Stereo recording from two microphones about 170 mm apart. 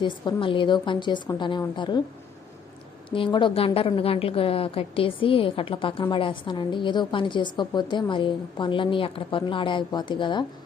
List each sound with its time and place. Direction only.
0.0 s a woman's voice: 30° left (ahead or behind)
3.2 s a woman's voice: 30° left (ahead or behind)